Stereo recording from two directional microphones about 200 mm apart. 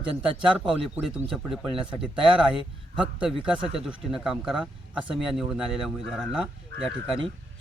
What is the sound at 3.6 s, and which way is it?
Speech, 30° right (ahead or behind).